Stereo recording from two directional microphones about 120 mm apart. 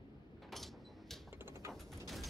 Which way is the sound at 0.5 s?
Centre (ahead or behind).